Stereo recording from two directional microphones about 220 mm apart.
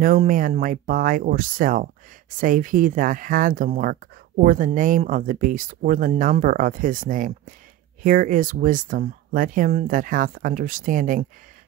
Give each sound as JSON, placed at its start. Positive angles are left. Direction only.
{"t": 0.0, "sound": "speech", "side_deg": -40}